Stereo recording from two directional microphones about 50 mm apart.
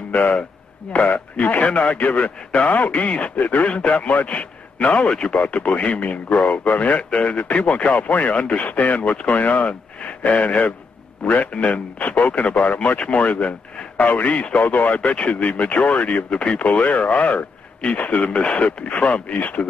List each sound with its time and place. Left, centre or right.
0.1 s a man's voice: left